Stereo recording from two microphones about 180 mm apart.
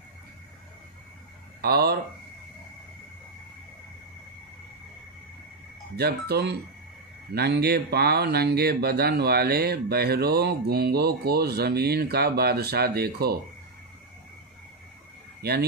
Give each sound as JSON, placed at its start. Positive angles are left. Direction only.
{"t": 1.6, "sound": "speech", "side_deg": -60}
{"t": 5.9, "sound": "speech", "side_deg": -60}
{"t": 15.4, "sound": "speech", "side_deg": -60}